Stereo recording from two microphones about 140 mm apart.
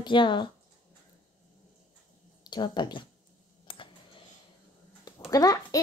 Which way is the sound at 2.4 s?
30° left (ahead or behind).